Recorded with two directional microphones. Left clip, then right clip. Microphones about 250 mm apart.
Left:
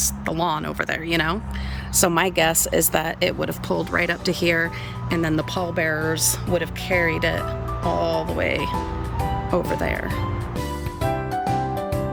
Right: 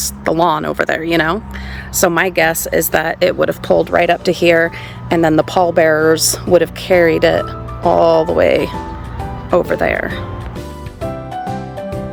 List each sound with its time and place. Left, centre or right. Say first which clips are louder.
0.0 s speech: right 10 dB; centre
11.0 s music: right 1 dB; centre